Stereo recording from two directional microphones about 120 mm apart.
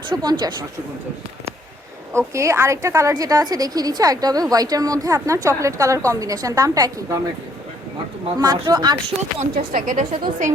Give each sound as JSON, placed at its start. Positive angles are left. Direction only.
{"t": 0.1, "sound": "a woman's voice", "side_deg": -35}
{"t": 2.1, "sound": "a woman's voice", "side_deg": -25}
{"t": 8.6, "sound": "a woman's voice", "side_deg": -35}
{"t": 9.4, "sound": "speech", "side_deg": -85}